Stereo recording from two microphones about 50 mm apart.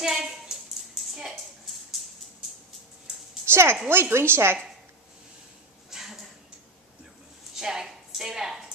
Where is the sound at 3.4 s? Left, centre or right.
Right.